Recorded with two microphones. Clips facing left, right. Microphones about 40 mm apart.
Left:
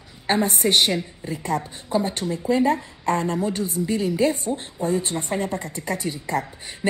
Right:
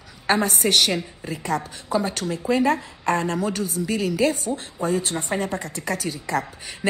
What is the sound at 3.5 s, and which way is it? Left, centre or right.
A woman's voice, left.